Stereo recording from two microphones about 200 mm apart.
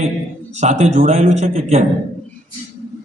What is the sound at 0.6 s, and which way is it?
A man's voice, 35° right (ahead or behind).